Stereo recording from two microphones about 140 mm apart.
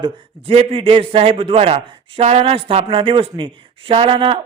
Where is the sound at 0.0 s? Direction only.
45° right (ahead or behind).